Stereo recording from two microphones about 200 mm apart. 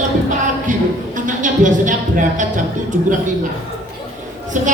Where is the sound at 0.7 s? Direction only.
40° right (ahead or behind).